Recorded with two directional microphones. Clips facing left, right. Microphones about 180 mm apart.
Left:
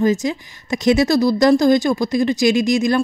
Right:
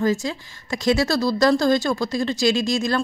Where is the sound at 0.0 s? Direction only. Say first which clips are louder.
Left 4 dB; 20° left (ahead or behind).